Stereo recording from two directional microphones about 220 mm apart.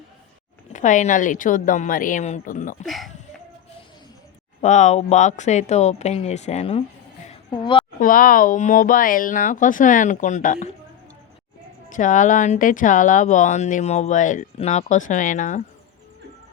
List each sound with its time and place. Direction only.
0.7 s speech: 35° left (ahead or behind)
2.8 s speech: centre (ahead or behind)
4.6 s speech: 30° left (ahead or behind)
7.3 s a sound: 20° left (ahead or behind)
7.9 s speech: 40° left (ahead or behind)
11.9 s speech: 35° left (ahead or behind)